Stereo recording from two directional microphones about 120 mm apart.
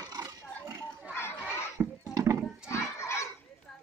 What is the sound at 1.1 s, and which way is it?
Children playing, 20° left (ahead or behind).